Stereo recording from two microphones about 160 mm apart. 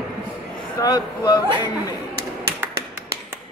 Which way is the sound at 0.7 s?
25° left (ahead or behind).